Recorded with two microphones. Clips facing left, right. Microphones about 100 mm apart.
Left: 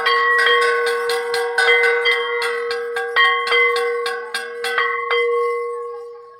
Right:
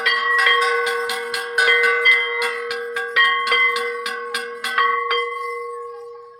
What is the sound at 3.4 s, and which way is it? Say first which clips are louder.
Cowbell: left 3 dB; 20° left (ahead or behind).